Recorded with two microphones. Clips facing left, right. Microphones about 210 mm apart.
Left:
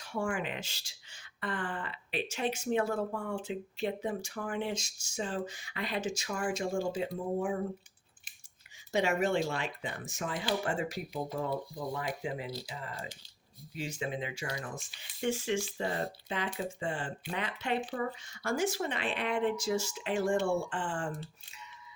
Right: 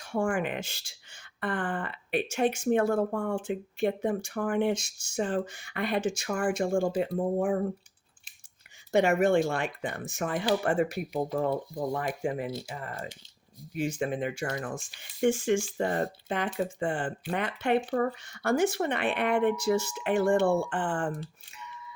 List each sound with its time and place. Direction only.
0.0 s speech: 50° right (ahead or behind)
8.9 s speech: 55° right (ahead or behind)